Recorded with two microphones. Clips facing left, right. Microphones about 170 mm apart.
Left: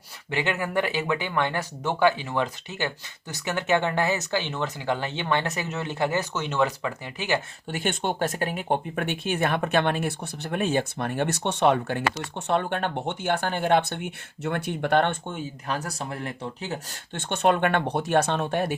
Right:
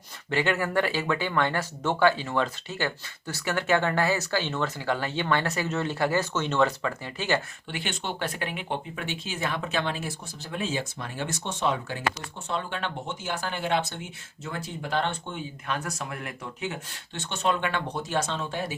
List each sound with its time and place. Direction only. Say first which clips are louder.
0.3 s speech: right 1 dB; 15° left (ahead or behind)
7.7 s speech: left 6 dB; 50° left (ahead or behind)
13.5 s speech: left 4 dB; 50° left (ahead or behind)
17.2 s speech: left 5 dB; 55° left (ahead or behind)